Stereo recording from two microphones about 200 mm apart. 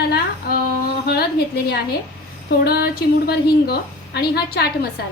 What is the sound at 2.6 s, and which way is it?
A woman's voice, 50° left (ahead or behind).